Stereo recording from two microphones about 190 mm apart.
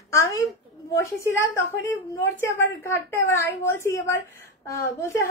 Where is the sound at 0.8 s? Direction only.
15° left (ahead or behind).